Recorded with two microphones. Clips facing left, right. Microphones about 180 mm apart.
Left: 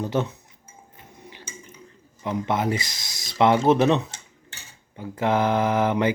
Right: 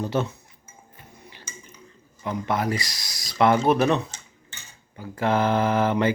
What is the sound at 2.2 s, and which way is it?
Speech, 20° left (ahead or behind).